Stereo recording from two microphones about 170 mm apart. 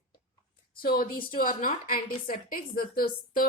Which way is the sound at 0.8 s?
60° left (ahead or behind).